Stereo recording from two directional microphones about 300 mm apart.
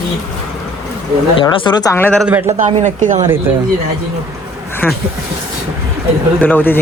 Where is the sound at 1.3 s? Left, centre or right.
Centre.